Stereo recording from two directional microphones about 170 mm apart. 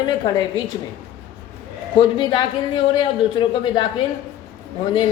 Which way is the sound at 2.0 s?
30° left (ahead or behind).